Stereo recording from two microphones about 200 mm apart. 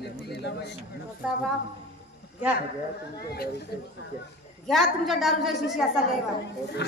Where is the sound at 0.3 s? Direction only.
55° left (ahead or behind).